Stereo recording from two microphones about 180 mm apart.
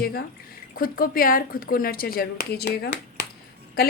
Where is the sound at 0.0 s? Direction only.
55° left (ahead or behind).